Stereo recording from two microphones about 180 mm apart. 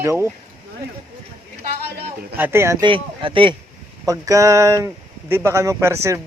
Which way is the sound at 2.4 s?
15° right (ahead or behind).